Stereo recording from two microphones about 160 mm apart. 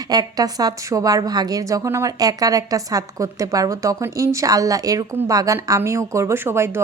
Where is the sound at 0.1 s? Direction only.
25° right (ahead or behind).